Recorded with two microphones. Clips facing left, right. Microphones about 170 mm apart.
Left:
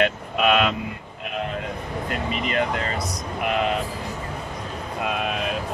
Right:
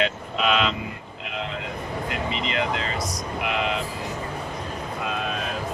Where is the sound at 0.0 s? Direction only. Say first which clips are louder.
Left 3 dB; 55° left (ahead or behind).